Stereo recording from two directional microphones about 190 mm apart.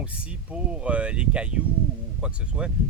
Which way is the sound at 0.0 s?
5° right (ahead or behind).